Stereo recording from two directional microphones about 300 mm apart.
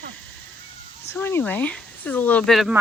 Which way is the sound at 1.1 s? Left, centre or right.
Centre.